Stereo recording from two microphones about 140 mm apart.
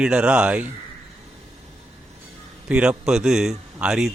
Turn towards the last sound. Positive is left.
turn(degrees=-5)  # may be behind; listen again after turning